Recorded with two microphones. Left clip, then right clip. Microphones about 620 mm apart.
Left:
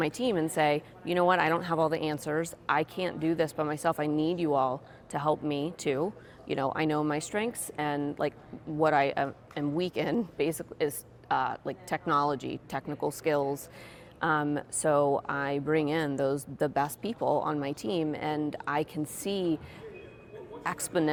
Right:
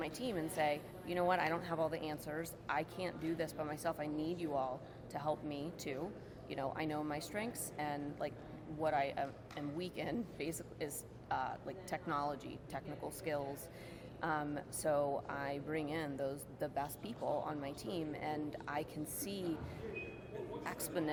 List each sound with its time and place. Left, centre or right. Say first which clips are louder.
0.0 s speech: left 12 dB; left
20.7 s speech: left 13 dB; left